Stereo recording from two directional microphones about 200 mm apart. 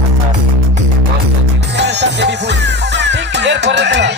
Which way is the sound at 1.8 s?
60° right (ahead or behind).